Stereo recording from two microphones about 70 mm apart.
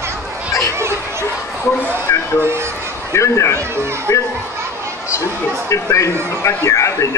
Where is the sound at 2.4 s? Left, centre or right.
Right.